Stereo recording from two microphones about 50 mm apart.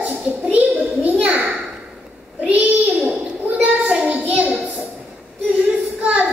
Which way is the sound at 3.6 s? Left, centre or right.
Right.